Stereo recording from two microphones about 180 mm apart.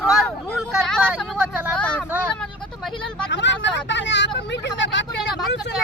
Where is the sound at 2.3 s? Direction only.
5° left (ahead or behind).